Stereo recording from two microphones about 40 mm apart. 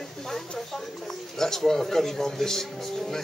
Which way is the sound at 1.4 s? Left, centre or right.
Centre.